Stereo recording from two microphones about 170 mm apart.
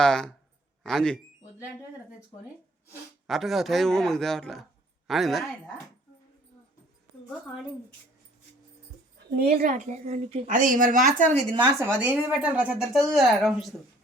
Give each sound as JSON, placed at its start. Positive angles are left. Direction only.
{"t": 0.0, "sound": "speech", "side_deg": 5}
{"t": 3.2, "sound": "speech", "side_deg": 0}
{"t": 9.3, "sound": "a woman's voice", "side_deg": -65}
{"t": 9.7, "sound": "speech", "side_deg": -40}
{"t": 10.5, "sound": "speech", "side_deg": -50}
{"t": 11.5, "sound": "speech", "side_deg": -25}
{"t": 11.9, "sound": "speech", "side_deg": -10}